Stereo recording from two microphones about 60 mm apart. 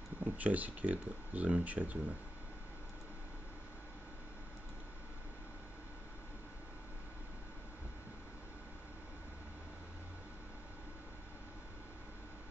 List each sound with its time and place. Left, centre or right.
0.2 s speech: right